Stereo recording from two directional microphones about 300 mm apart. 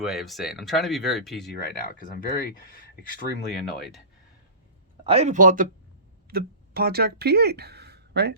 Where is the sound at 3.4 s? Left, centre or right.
Centre.